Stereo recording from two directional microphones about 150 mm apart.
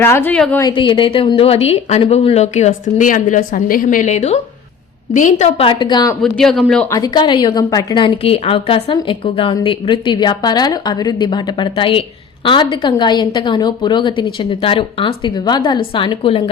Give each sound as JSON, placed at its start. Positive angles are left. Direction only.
{"t": 0.0, "sound": "a woman's voice", "side_deg": 15}
{"t": 0.6, "sound": "a woman's voice", "side_deg": 35}
{"t": 5.5, "sound": "a woman's voice", "side_deg": 35}
{"t": 6.2, "sound": "speech", "side_deg": 0}
{"t": 6.9, "sound": "a woman's voice", "side_deg": 25}